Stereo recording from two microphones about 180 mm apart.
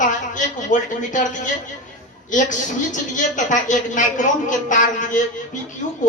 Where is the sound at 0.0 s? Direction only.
45° left (ahead or behind).